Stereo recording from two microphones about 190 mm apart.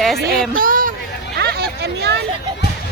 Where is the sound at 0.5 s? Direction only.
45° right (ahead or behind).